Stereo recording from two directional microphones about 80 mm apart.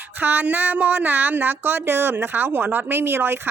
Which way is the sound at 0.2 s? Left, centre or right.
Right.